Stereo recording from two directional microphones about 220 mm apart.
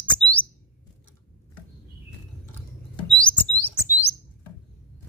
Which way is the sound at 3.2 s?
5° left (ahead or behind).